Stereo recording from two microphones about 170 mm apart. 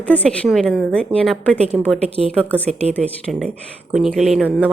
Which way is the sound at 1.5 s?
40° right (ahead or behind).